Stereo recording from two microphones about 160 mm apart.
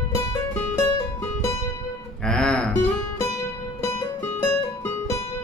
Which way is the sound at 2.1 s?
5° left (ahead or behind).